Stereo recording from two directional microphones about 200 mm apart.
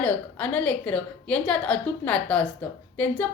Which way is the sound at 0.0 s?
5° left (ahead or behind).